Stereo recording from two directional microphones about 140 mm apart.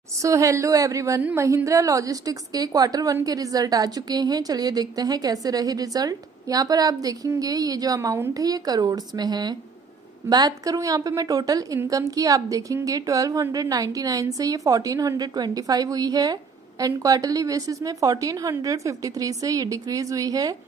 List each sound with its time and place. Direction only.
0.2 s a woman's voice: 20° right (ahead or behind)